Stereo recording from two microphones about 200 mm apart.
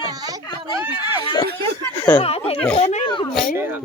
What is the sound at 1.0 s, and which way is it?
Speech, 20° left (ahead or behind).